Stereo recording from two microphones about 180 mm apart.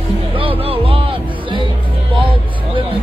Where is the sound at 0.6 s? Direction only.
30° right (ahead or behind).